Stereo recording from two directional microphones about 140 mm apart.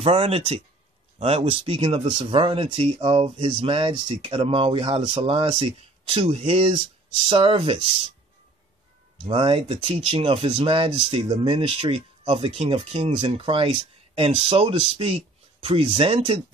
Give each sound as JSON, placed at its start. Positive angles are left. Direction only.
{"t": 0.0, "sound": "speech", "side_deg": -40}
{"t": 9.3, "sound": "speech", "side_deg": -40}